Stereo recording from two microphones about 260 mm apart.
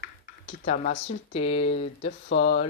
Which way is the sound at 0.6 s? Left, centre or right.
Left.